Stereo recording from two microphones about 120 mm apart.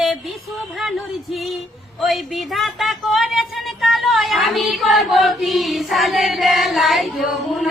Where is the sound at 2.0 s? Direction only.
Centre (ahead or behind).